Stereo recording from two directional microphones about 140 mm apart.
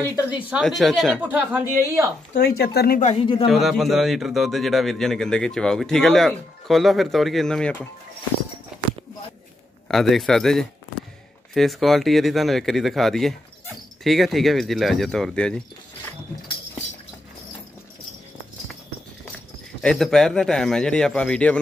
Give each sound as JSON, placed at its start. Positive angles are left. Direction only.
{"t": 0.6, "sound": "speech", "side_deg": 0}
{"t": 1.2, "sound": "a woman's voice", "side_deg": -10}
{"t": 2.4, "sound": "speech", "side_deg": 90}
{"t": 3.1, "sound": "speech", "side_deg": 40}
{"t": 3.4, "sound": "speech", "side_deg": 0}
{"t": 9.8, "sound": "speech", "side_deg": 0}
{"t": 19.8, "sound": "speech", "side_deg": 5}